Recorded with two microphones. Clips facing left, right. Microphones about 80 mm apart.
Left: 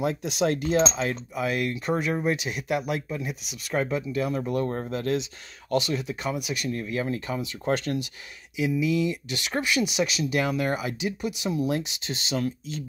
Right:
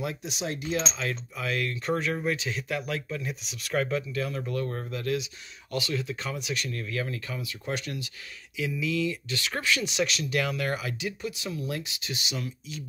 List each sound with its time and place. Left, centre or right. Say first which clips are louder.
0.2 s cutlery: left 8 dB; left
1.0 s speech: left 4 dB; centre
2.1 s speech: left 3 dB; left
6.7 s speech: left 5 dB; left
7.6 s speech: left 8 dB; left
8.5 s speech: left 5 dB; centre
10.6 s speech: left 4 dB; centre